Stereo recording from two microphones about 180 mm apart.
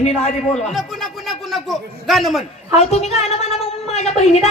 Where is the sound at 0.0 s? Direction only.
40° left (ahead or behind).